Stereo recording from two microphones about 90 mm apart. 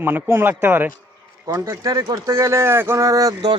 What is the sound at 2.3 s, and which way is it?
Speech, 30° right (ahead or behind).